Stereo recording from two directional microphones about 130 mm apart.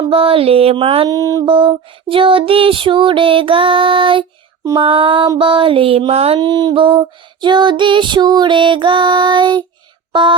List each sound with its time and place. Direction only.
0.0 s a sound: 45° right (ahead or behind)
1.0 s music: 25° right (ahead or behind)
1.5 s female singing: 40° right (ahead or behind)
5.4 s a sound: 40° right (ahead or behind)
6.4 s female singing: 30° right (ahead or behind)
10.1 s speech: 40° right (ahead or behind)